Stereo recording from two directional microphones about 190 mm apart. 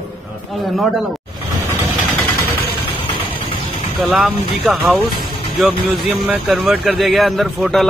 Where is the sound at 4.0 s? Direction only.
5° right (ahead or behind).